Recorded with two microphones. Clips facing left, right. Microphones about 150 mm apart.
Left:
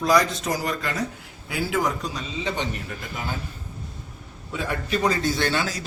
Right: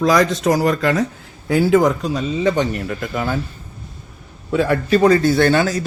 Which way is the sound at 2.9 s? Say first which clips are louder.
Right 10 dB; 65° right (ahead or behind).